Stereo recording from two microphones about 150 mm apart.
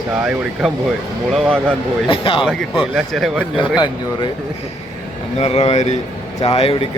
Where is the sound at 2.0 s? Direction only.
35° left (ahead or behind).